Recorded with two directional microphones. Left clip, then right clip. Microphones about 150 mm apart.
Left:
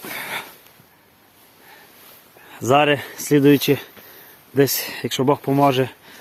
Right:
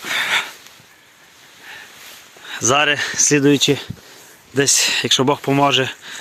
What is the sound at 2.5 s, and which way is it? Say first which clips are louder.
Speech: even; centre (ahead or behind).